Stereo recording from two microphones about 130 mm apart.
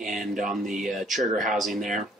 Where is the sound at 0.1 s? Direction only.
Centre (ahead or behind).